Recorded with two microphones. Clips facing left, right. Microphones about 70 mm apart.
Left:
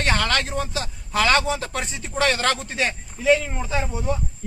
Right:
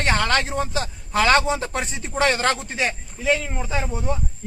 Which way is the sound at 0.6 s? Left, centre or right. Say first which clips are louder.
Right 2 dB; right.